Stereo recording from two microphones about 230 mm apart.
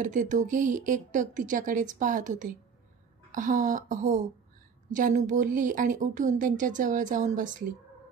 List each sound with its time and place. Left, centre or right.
0.0 s speech: right